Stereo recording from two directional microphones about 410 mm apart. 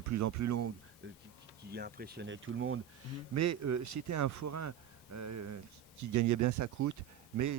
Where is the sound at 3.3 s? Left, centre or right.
Right.